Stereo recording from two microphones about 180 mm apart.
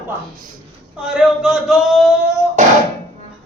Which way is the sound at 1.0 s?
5° right (ahead or behind).